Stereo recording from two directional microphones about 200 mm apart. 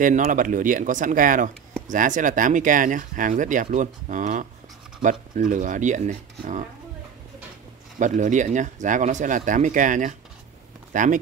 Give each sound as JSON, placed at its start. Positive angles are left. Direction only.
{"t": 0.0, "sound": "speech", "side_deg": -40}
{"t": 8.0, "sound": "speech", "side_deg": -40}